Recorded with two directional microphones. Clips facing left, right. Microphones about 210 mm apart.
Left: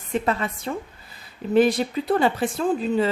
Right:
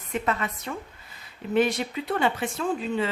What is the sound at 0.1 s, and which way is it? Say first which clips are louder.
Speech: left 4 dB; 30° left (ahead or behind).